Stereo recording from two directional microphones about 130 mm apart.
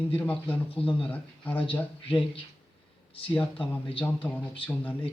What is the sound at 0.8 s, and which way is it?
Speech, 45° left (ahead or behind).